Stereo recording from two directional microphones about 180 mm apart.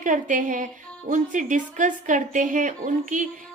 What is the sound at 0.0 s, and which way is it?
A woman's voice, 45° right (ahead or behind).